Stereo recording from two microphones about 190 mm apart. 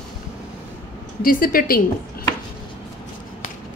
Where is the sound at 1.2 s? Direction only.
50° left (ahead or behind).